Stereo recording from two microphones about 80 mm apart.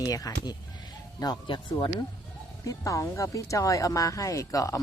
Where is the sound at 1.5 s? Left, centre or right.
Left.